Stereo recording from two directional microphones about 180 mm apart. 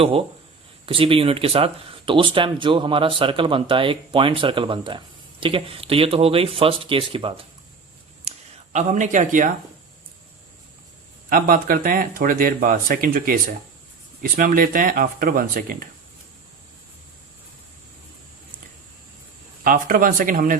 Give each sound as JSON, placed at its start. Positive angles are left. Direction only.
{"t": 0.0, "sound": "speech", "side_deg": -30}
{"t": 8.7, "sound": "speech", "side_deg": -40}
{"t": 11.3, "sound": "speech", "side_deg": -50}
{"t": 19.6, "sound": "speech", "side_deg": -50}